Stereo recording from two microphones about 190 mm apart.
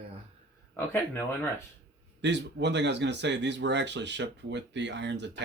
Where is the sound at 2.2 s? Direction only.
65° right (ahead or behind).